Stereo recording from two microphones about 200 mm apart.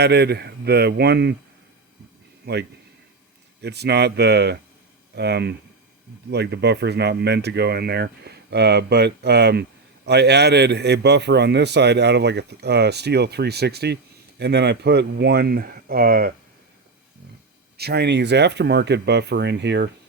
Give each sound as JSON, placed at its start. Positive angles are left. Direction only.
{"t": 0.0, "sound": "a man's voice", "side_deg": -55}
{"t": 2.4, "sound": "a man's voice", "side_deg": -55}
{"t": 17.7, "sound": "a man's voice", "side_deg": -55}